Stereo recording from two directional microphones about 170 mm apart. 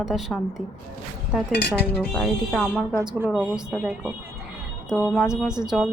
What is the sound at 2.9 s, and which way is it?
Speech, 20° right (ahead or behind).